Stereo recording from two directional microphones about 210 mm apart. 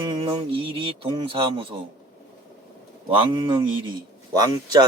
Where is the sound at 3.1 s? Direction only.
25° right (ahead or behind).